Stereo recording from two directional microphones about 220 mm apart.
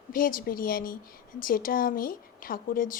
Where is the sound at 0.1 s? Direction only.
40° left (ahead or behind).